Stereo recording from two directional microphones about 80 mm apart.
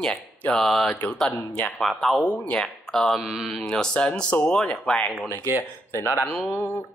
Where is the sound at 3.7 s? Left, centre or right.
Centre.